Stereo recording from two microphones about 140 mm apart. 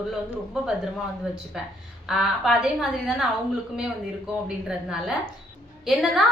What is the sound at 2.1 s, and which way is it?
A woman's voice, 5° right (ahead or behind).